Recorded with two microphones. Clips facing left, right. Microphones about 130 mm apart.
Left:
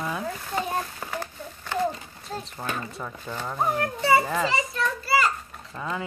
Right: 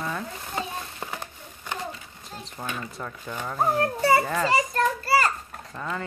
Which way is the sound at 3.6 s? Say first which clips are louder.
Right 2 dB; 30° right (ahead or behind).